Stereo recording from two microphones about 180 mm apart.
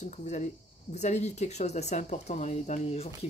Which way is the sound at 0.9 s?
40° left (ahead or behind).